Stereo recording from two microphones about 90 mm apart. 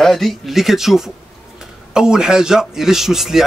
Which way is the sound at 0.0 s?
Centre (ahead or behind).